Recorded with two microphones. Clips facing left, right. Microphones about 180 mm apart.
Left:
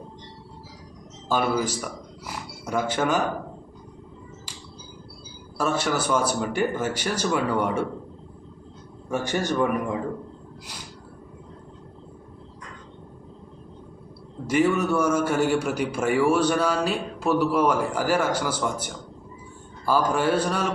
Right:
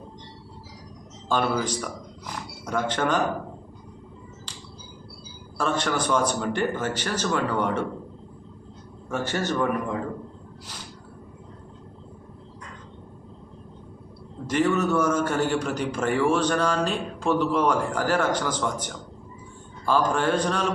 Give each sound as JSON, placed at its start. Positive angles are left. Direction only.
{"t": 1.3, "sound": "speech", "side_deg": 5}
{"t": 5.5, "sound": "a man's voice", "side_deg": 10}
{"t": 9.0, "sound": "a man's voice", "side_deg": 10}
{"t": 14.4, "sound": "a man's voice", "side_deg": 10}